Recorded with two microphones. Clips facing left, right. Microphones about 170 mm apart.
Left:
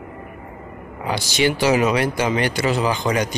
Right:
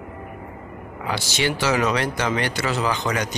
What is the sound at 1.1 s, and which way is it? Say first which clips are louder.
Speech: left 4 dB; 15° left (ahead or behind).